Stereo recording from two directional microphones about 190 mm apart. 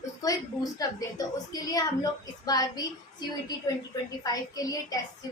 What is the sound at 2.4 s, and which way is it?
A woman's voice, 20° left (ahead or behind).